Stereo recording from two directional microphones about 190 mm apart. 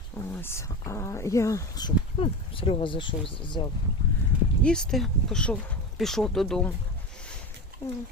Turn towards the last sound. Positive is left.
turn(degrees=10)  # may be behind; listen again after turning